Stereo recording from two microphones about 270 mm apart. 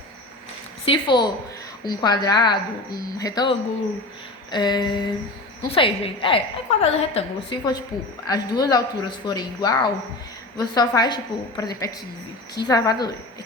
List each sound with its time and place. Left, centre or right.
0.9 s a woman's voice: centre